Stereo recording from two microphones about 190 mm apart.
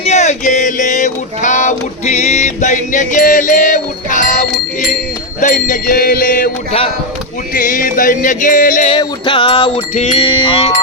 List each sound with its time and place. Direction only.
0.0 s mantra: 35° left (ahead or behind)
5.4 s music: 40° left (ahead or behind)
6.7 s speech: 30° left (ahead or behind)
7.5 s music: 45° left (ahead or behind)
8.9 s music: 25° left (ahead or behind)